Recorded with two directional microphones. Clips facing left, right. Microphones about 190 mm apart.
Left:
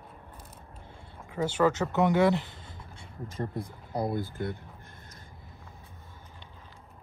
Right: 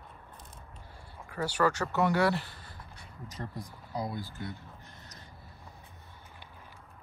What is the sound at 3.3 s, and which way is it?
Speech, 55° left (ahead or behind).